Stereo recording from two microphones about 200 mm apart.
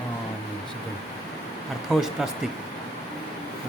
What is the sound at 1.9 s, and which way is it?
Speech, 5° right (ahead or behind).